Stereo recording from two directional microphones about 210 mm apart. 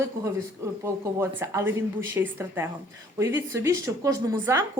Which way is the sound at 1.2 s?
10° right (ahead or behind).